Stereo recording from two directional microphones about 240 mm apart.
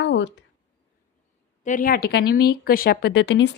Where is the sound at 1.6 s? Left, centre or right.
Left.